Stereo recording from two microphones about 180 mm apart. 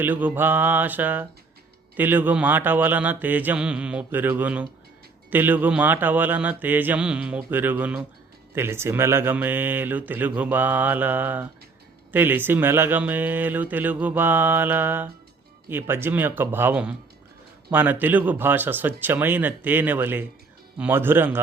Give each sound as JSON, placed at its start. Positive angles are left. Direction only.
{"t": 0.0, "sound": "speech", "side_deg": -10}